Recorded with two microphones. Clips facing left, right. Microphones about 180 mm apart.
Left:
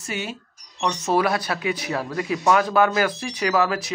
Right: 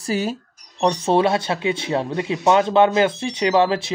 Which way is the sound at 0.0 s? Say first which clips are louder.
Right 7 dB; 35° right (ahead or behind).